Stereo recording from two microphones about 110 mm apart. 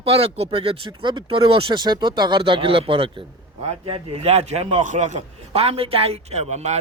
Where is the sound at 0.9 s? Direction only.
45° right (ahead or behind).